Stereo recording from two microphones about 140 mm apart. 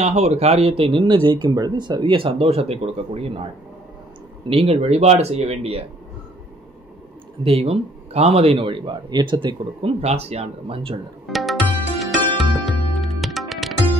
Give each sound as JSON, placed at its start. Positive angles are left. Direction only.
{"t": 0.0, "sound": "speech", "side_deg": -50}
{"t": 4.5, "sound": "speech", "side_deg": -45}
{"t": 7.4, "sound": "speech", "side_deg": -45}
{"t": 11.2, "sound": "music", "side_deg": 0}